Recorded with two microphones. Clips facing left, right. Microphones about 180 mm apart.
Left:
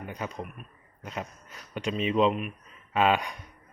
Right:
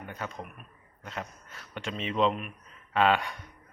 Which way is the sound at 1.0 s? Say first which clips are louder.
Left 2 dB; 15° left (ahead or behind).